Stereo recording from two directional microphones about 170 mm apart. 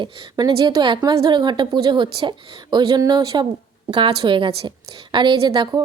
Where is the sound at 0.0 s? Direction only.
25° right (ahead or behind).